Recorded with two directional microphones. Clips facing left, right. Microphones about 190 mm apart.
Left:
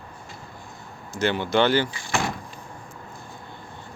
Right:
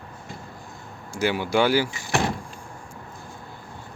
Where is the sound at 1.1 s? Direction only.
10° right (ahead or behind).